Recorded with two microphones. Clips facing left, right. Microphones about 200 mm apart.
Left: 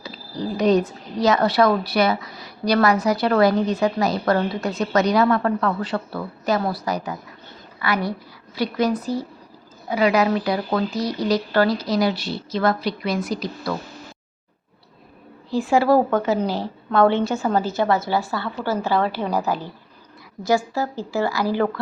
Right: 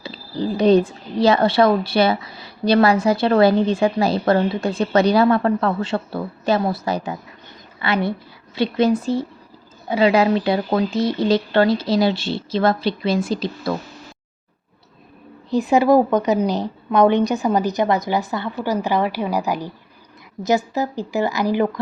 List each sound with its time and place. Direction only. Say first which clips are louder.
0.0 s speech: right 4 dB; 30° right (ahead or behind)
15.4 s a woman's voice: right 2 dB; 20° right (ahead or behind)